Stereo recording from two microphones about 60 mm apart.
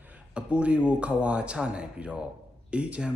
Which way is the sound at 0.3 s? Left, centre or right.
Right.